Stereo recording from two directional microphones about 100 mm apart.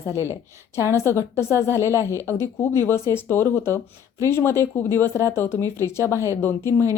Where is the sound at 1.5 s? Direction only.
30° right (ahead or behind).